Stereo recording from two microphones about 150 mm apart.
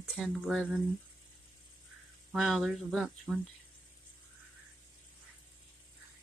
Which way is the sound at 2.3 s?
Centre (ahead or behind).